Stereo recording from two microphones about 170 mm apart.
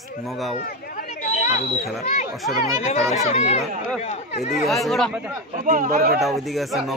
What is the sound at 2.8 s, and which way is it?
Speech, 40° left (ahead or behind).